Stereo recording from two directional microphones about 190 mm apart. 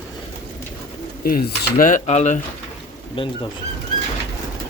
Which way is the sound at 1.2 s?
50° left (ahead or behind).